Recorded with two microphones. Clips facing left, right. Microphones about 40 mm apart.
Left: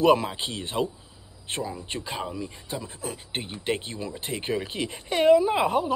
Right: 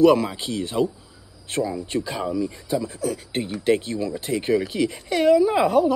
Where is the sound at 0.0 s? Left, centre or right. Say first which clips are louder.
Right 4 dB; left.